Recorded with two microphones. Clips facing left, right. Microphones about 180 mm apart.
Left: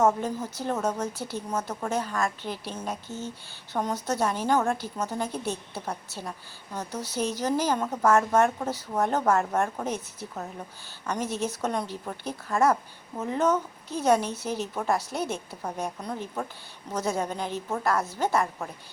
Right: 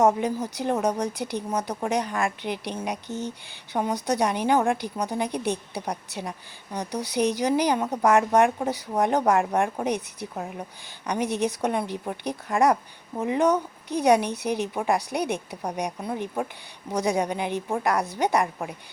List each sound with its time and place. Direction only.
0.0 s a woman's voice: 15° right (ahead or behind)